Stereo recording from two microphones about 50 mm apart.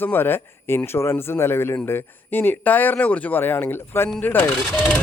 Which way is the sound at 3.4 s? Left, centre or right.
Left.